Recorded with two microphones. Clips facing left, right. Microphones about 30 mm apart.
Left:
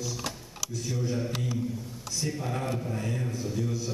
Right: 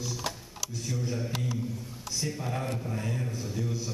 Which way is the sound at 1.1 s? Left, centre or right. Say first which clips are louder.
Left 2 dB; centre.